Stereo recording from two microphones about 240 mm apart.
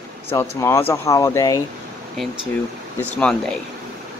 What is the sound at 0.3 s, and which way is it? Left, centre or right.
Speech, centre.